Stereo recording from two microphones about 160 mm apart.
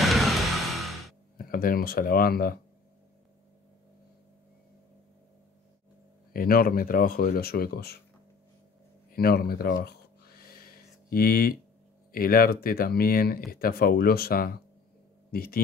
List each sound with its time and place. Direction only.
0.0 s music: centre (ahead or behind)
1.4 s speech: 65° left (ahead or behind)
6.3 s speech: 65° left (ahead or behind)
9.1 s a sound: 75° left (ahead or behind)
12.1 s speech: 65° left (ahead or behind)